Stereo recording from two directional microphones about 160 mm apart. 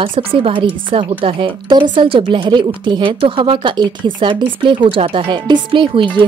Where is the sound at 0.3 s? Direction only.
35° right (ahead or behind).